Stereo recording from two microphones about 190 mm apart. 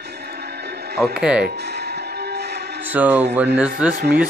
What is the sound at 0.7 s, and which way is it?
Music, 60° right (ahead or behind).